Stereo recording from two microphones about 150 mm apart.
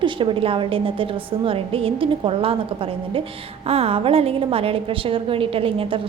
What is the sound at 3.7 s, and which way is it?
A woman's voice, 40° right (ahead or behind).